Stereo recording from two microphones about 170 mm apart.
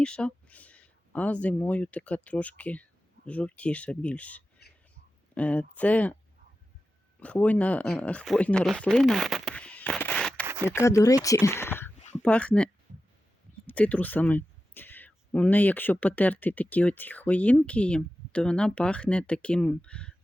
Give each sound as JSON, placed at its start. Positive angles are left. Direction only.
{"t": 0.0, "sound": "speech", "side_deg": 5}
{"t": 7.2, "sound": "speech", "side_deg": 10}
{"t": 10.4, "sound": "a sound", "side_deg": -10}
{"t": 10.7, "sound": "speech", "side_deg": 15}